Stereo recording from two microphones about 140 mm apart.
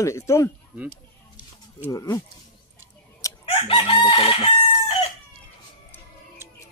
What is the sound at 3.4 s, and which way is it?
Chicken, 45° left (ahead or behind).